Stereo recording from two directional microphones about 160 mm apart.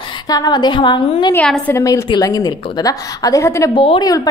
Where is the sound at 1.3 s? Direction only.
10° left (ahead or behind).